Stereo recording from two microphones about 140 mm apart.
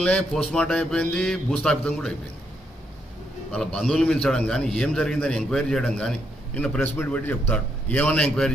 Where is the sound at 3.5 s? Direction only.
5° left (ahead or behind).